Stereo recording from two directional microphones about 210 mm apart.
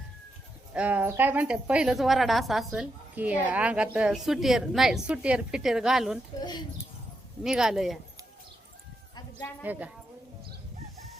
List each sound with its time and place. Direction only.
0.7 s a woman's voice: 5° right (ahead or behind)
7.4 s a woman's voice: centre (ahead or behind)
9.1 s a sound: 10° left (ahead or behind)
9.6 s a woman's voice: 5° right (ahead or behind)